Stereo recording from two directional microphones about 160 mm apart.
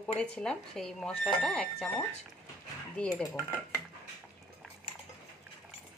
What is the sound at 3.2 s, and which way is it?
Dishes, 20° left (ahead or behind).